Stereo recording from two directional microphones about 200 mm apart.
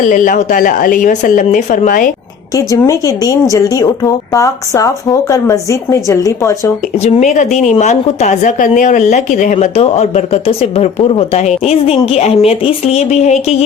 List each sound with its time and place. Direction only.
0.1 s a woman's voice: 40° left (ahead or behind)
2.6 s speech: 15° left (ahead or behind)
7.0 s a woman's voice: 35° left (ahead or behind)